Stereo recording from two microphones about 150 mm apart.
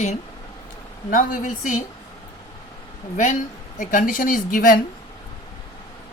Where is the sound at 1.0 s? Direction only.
60° left (ahead or behind).